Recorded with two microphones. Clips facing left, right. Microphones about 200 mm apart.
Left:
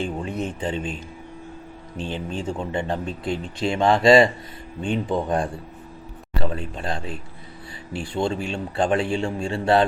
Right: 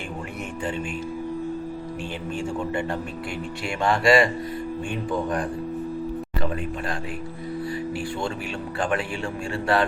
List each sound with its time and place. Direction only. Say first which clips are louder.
0.0 s speech: left 6 dB; 20° left (ahead or behind)
2.5 s a man's voice: left 1 dB; 20° left (ahead or behind)
7.9 s a man's voice: left 3 dB; 25° left (ahead or behind)